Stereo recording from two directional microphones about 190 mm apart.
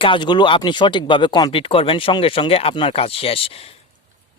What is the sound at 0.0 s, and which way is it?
A man's voice, 25° left (ahead or behind).